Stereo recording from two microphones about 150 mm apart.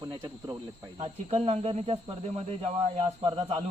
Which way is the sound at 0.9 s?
40° right (ahead or behind).